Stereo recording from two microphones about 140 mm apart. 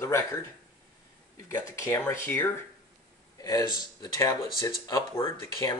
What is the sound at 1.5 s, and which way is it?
Speech, 20° left (ahead or behind).